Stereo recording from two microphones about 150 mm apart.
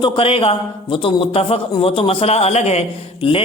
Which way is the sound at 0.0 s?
35° left (ahead or behind).